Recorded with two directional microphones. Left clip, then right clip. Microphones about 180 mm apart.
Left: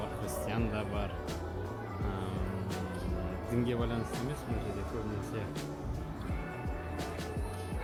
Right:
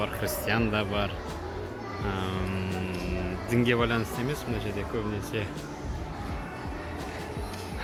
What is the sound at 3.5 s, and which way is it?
Speech, 5° left (ahead or behind).